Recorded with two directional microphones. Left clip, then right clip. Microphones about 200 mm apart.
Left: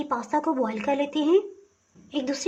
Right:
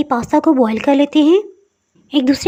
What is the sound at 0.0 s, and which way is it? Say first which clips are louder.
A woman's voice: right 11 dB; 40° right (ahead or behind).